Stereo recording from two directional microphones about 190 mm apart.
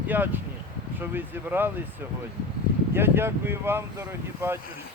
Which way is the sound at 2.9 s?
10° right (ahead or behind).